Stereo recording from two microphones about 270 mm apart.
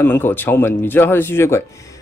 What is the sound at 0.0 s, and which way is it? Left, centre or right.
Speech, centre.